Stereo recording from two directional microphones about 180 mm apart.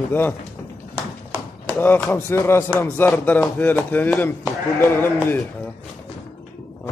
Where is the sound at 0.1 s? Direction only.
10° left (ahead or behind).